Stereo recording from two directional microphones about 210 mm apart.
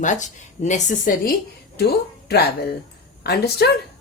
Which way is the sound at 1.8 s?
50° left (ahead or behind).